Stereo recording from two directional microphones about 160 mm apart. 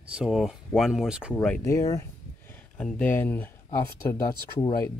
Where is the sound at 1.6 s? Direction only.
20° left (ahead or behind).